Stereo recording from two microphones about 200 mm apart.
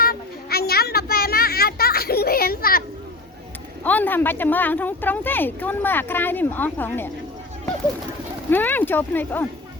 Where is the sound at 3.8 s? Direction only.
10° left (ahead or behind).